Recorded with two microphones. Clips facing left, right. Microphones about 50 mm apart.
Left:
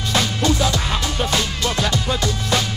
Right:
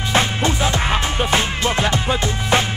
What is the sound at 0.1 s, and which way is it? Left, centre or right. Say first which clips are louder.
Music: right 1 dB; right.